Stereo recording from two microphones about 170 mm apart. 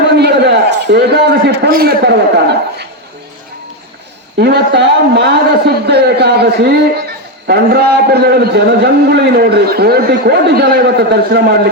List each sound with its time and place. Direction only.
0.1 s a man's voice: 75° right (ahead or behind)
4.4 s a man's voice: 75° right (ahead or behind)